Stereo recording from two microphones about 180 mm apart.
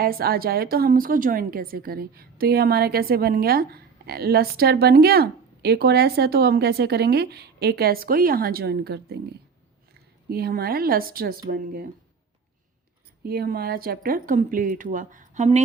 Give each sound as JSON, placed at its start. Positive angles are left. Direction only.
{"t": 0.0, "sound": "a woman's voice", "side_deg": -55}
{"t": 10.2, "sound": "a woman's voice", "side_deg": -60}
{"t": 13.2, "sound": "speech", "side_deg": -60}